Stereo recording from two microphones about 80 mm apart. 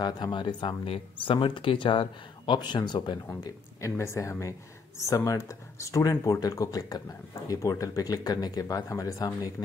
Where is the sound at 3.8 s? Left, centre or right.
Left.